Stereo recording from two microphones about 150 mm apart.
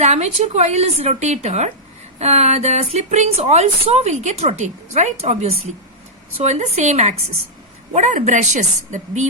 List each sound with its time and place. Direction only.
0.0 s speech: 45° right (ahead or behind)